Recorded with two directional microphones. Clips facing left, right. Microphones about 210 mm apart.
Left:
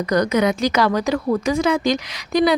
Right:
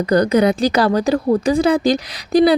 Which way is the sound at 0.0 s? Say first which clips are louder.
Right 4 dB; 30° right (ahead or behind).